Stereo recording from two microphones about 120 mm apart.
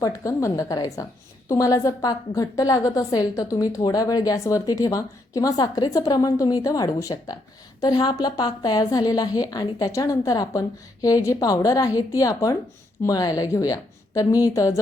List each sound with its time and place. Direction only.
0.0 s a woman's voice: 25° left (ahead or behind)